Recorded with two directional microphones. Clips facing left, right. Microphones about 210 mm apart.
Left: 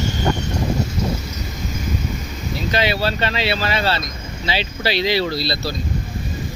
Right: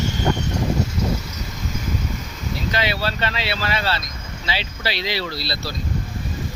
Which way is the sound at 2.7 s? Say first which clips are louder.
Left 5 dB; 20° left (ahead or behind).